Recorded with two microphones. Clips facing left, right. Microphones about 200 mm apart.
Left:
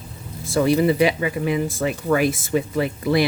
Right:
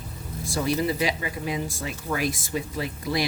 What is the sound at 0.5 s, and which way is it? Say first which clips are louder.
Speech: left 8 dB; 60° left (ahead or behind).